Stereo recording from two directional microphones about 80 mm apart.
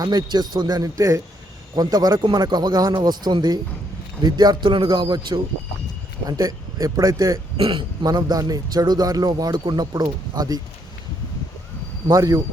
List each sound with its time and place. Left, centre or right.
0.0 s speech: right
1.7 s speech: right
6.2 s speech: right
7.6 s speech: right
8.0 s speech: right
12.0 s speech: right